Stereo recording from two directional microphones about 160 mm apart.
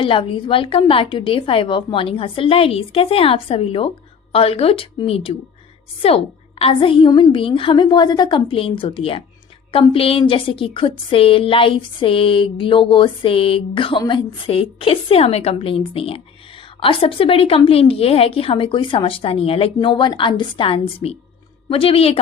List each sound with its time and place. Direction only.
0.0 s speech: 30° left (ahead or behind)